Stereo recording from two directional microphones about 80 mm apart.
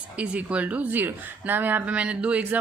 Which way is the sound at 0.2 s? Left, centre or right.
Centre.